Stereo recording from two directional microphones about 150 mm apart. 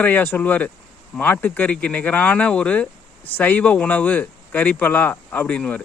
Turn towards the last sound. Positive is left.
turn(degrees=10)  # may be behind; listen again after turning